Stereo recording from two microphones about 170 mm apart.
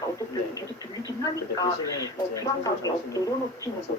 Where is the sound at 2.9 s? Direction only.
20° left (ahead or behind).